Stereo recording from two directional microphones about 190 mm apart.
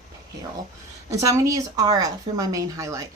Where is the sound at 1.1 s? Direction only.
15° right (ahead or behind).